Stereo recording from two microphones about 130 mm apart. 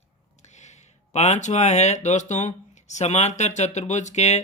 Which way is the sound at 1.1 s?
60° left (ahead or behind).